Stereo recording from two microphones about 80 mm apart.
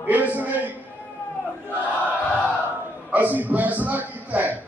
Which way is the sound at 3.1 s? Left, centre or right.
Right.